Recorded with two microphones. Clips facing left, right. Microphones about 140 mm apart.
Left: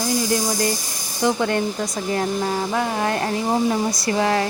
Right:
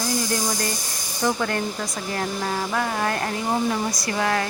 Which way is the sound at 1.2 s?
20° left (ahead or behind).